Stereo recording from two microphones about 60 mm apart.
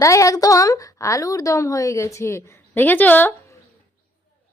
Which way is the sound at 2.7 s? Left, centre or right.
Left.